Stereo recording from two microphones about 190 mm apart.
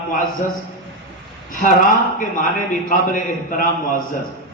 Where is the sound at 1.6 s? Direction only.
45° left (ahead or behind).